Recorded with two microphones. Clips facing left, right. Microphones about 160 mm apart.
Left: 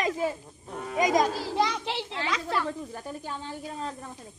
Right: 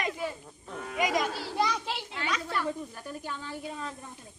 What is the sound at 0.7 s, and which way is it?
Children playing, 30° left (ahead or behind).